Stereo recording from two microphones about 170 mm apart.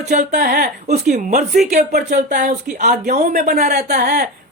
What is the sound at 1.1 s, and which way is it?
Speech, 45° right (ahead or behind).